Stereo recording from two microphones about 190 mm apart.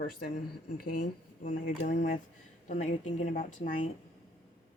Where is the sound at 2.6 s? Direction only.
40° left (ahead or behind).